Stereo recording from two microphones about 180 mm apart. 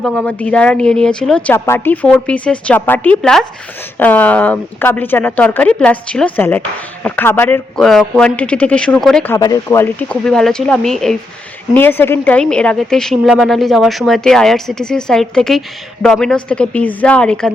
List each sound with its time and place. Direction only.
0.0 s speech: 5° left (ahead or behind)
7.8 s a woman's voice: centre (ahead or behind)
9.3 s a woman's voice: 20° left (ahead or behind)